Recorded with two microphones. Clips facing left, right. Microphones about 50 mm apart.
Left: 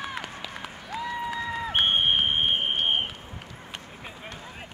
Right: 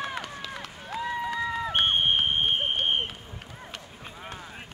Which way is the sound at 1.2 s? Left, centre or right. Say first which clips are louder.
Right 1 dB; centre.